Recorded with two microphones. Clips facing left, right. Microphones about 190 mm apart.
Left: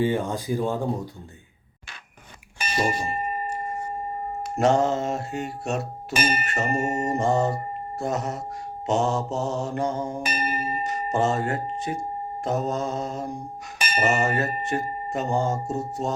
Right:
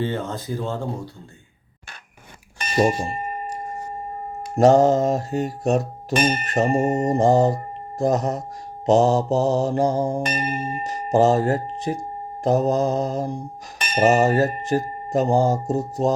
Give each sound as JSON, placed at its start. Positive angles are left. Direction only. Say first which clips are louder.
{"t": 0.0, "sound": "speech", "louder": "left 2 dB", "side_deg": 15}
{"t": 4.5, "sound": "music", "louder": "right 7 dB", "side_deg": -35}
{"t": 6.1, "sound": "tubular bells", "louder": "right 5 dB", "side_deg": 5}
{"t": 6.4, "sound": "music", "louder": "right 6 dB", "side_deg": -35}
{"t": 10.2, "sound": "tubular bells", "louder": "right 2 dB", "side_deg": 5}
{"t": 11.1, "sound": "music", "louder": "right 8 dB", "side_deg": -35}
{"t": 13.7, "sound": "a sound", "louder": "right 3 dB", "side_deg": 5}
{"t": 14.0, "sound": "music", "louder": "right 7 dB", "side_deg": -35}